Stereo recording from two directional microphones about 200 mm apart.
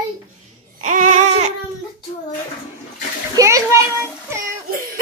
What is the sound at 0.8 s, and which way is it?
Baby cry, 40° right (ahead or behind).